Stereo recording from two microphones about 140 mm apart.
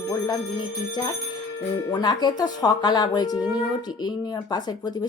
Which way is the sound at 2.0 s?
30° left (ahead or behind).